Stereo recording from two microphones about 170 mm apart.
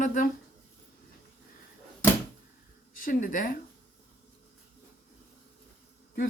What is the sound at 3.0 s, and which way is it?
Speech, 55° left (ahead or behind).